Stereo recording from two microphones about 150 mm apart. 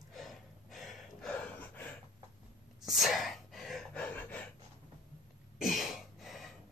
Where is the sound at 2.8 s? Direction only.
Centre (ahead or behind).